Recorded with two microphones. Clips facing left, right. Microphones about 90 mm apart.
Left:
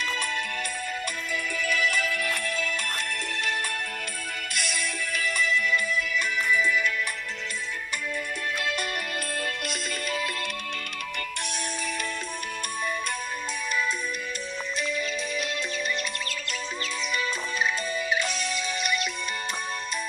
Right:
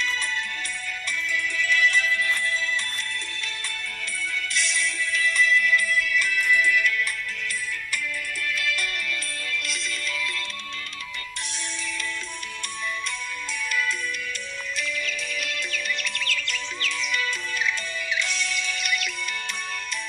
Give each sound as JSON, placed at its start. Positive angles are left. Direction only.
{"t": 0.0, "sound": "music", "side_deg": 55}
{"t": 8.4, "sound": "music", "side_deg": 40}
{"t": 15.0, "sound": "music", "side_deg": 35}